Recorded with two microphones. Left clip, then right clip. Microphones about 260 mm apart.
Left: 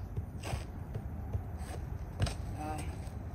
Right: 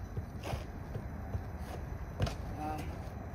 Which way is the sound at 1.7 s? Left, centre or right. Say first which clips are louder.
Right 2 dB; left.